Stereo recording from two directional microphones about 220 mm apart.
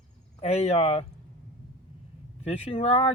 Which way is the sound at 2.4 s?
25° left (ahead or behind).